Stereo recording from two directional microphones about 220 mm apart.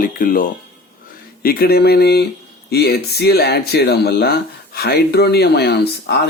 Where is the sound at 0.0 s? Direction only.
40° left (ahead or behind).